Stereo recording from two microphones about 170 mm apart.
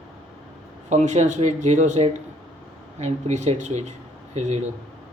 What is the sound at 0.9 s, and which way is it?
Speech, 45° right (ahead or behind).